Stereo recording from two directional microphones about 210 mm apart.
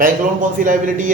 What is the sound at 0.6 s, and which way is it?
Speech, 35° right (ahead or behind).